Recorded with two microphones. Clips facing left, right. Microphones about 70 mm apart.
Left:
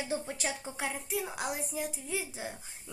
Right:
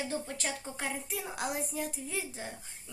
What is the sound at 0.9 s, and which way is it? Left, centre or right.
Speech, centre.